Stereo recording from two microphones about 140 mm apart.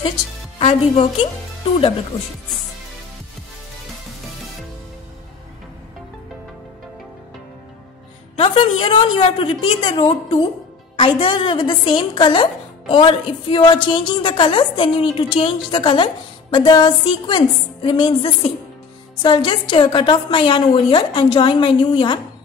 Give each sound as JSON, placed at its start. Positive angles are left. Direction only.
{"t": 0.6, "sound": "a woman's voice", "side_deg": 45}
{"t": 8.4, "sound": "a woman's voice", "side_deg": 35}